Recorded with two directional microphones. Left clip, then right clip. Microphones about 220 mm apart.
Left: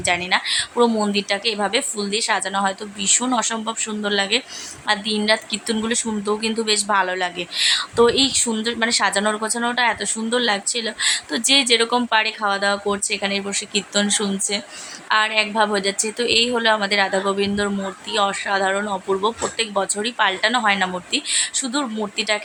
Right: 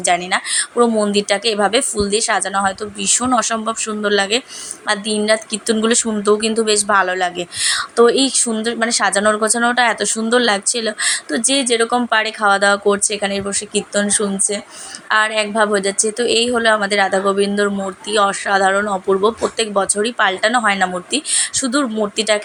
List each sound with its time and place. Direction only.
0.0 s speech: 15° right (ahead or behind)